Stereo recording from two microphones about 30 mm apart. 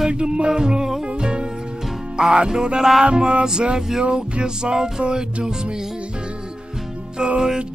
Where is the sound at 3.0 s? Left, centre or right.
Right.